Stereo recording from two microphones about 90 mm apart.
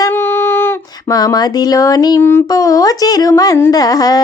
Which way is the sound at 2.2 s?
30° left (ahead or behind).